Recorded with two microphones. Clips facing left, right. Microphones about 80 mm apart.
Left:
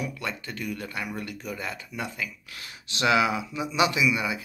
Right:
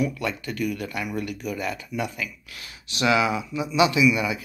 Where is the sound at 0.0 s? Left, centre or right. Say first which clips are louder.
Right 7 dB; left.